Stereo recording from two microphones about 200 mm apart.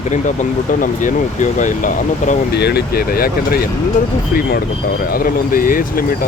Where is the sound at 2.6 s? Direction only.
55° left (ahead or behind).